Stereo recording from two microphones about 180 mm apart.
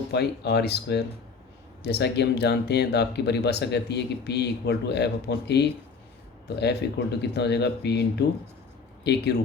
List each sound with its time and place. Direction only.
0.1 s speech: 65° left (ahead or behind)
9.0 s speech: 65° left (ahead or behind)